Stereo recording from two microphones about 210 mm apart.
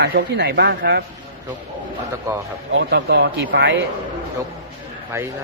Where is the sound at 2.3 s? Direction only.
15° right (ahead or behind).